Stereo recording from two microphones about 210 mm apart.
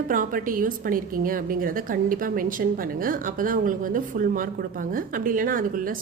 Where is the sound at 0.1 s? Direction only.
40° right (ahead or behind).